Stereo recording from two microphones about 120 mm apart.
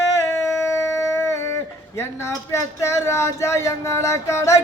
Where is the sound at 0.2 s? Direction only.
25° left (ahead or behind).